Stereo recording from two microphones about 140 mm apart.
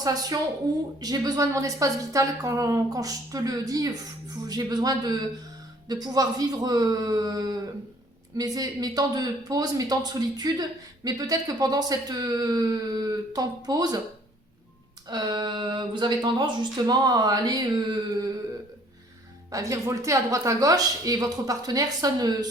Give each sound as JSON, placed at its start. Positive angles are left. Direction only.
{"t": 0.0, "sound": "speech", "side_deg": -25}
{"t": 15.1, "sound": "speech", "side_deg": -30}
{"t": 19.5, "sound": "speech", "side_deg": -25}